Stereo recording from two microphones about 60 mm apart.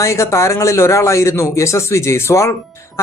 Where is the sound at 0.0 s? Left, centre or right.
Left.